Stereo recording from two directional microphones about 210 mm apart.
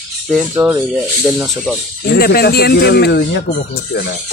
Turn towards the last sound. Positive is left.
turn(degrees=50)  # may be behind; listen again after turning